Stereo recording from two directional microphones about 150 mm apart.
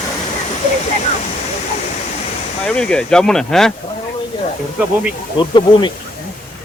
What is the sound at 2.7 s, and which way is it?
Speech, 5° left (ahead or behind).